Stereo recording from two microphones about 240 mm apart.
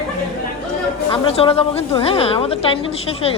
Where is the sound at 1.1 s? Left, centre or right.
Left.